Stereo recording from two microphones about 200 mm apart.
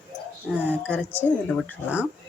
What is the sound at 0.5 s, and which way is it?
Speech, 10° right (ahead or behind).